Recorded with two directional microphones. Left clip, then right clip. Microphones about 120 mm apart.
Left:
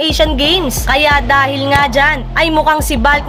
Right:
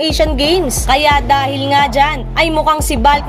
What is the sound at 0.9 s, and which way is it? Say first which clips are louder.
A woman's voice: even; 45° right (ahead or behind).